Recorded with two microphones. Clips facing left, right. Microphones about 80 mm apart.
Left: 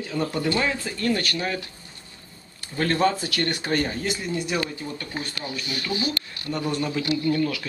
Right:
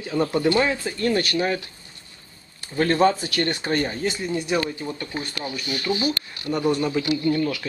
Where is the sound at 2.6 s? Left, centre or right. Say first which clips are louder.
Right 3 dB; centre.